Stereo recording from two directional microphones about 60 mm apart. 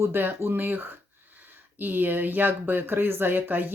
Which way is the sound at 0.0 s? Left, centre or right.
Right.